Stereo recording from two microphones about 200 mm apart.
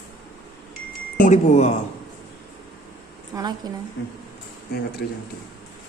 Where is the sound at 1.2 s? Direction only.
35° left (ahead or behind).